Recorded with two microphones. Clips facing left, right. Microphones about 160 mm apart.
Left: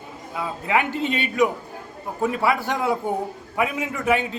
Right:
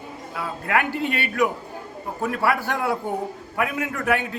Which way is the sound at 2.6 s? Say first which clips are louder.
Left 2 dB; 15° left (ahead or behind).